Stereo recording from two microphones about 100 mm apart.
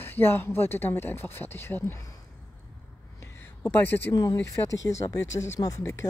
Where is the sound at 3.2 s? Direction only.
20° left (ahead or behind).